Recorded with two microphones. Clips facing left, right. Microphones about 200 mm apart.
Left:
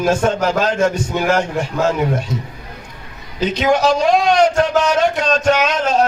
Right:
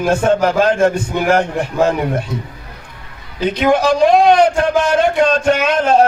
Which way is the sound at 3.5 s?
55° right (ahead or behind).